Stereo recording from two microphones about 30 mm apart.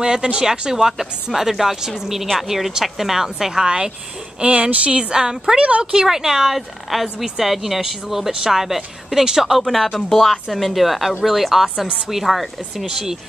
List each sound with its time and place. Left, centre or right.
0.0 s speech: right
3.6 s speech: right
4.4 s speech: right
5.1 s speech: right
5.6 s speech: right
6.0 s speech: centre
10.1 s a woman's voice: centre